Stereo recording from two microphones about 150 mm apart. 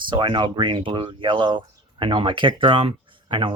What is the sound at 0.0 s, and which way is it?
Speech, 30° right (ahead or behind).